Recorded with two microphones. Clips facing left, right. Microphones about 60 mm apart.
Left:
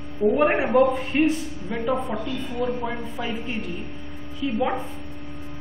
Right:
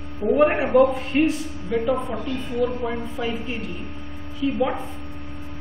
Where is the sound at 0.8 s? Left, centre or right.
Centre.